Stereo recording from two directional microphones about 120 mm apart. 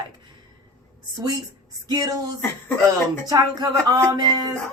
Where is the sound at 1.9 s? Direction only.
30° right (ahead or behind).